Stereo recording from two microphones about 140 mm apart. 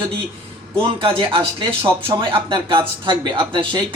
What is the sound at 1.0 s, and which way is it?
Speech, 40° right (ahead or behind).